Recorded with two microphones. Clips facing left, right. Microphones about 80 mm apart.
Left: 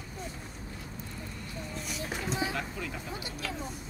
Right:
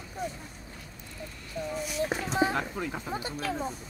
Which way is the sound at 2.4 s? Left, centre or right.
Right.